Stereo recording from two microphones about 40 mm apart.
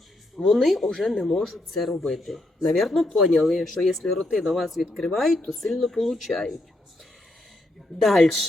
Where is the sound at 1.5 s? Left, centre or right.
Centre.